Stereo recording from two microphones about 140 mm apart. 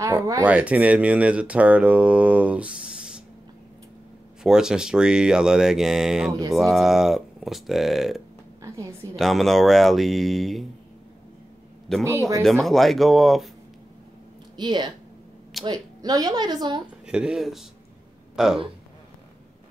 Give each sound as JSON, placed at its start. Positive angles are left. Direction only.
{"t": 0.0, "sound": "speech", "side_deg": -25}
{"t": 0.5, "sound": "speech", "side_deg": -10}
{"t": 4.4, "sound": "speech", "side_deg": -5}
{"t": 12.0, "sound": "speech", "side_deg": -20}
{"t": 12.4, "sound": "speech", "side_deg": 0}
{"t": 14.6, "sound": "a woman's voice", "side_deg": -30}
{"t": 16.8, "sound": "speech", "side_deg": -5}